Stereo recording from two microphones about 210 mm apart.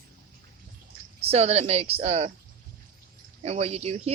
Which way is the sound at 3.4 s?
30° right (ahead or behind).